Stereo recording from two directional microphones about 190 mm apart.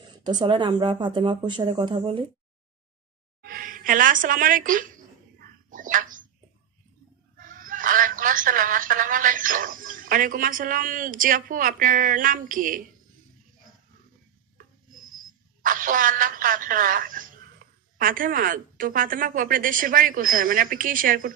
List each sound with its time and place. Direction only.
0.0 s speech: 25° right (ahead or behind)
3.4 s a woman's voice: 50° right (ahead or behind)
5.4 s a sound: 45° right (ahead or behind)
7.3 s a woman's voice: 45° right (ahead or behind)
15.6 s a woman's voice: 45° right (ahead or behind)